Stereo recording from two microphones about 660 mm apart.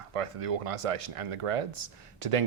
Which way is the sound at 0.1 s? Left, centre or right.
Right.